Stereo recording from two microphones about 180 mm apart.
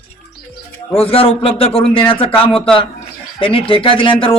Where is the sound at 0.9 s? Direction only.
30° left (ahead or behind).